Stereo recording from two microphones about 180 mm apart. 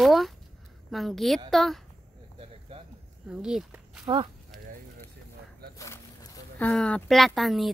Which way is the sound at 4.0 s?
25° right (ahead or behind).